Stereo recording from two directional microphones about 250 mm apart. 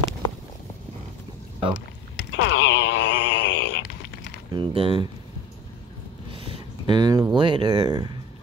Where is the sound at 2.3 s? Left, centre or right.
Left.